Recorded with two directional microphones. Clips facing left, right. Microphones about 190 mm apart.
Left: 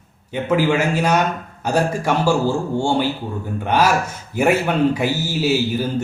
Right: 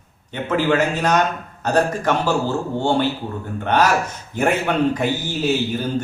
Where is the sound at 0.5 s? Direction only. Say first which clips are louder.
Left 1 dB; 10° left (ahead or behind).